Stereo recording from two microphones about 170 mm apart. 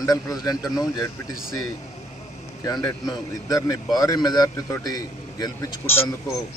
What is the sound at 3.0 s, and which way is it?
A man's voice, 20° left (ahead or behind).